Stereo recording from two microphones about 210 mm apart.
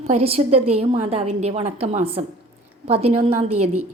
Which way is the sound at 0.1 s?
30° right (ahead or behind).